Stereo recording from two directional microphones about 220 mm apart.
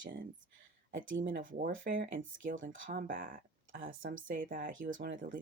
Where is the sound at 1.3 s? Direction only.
40° right (ahead or behind).